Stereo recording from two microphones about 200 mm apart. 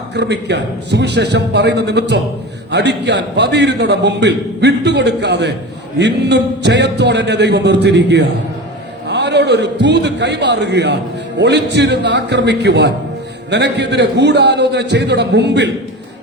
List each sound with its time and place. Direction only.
0.1 s a man's voice: 60° right (ahead or behind)